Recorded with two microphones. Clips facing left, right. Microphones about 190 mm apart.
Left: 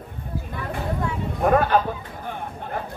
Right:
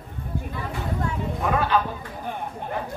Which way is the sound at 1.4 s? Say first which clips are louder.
Left 5 dB; 50° left (ahead or behind).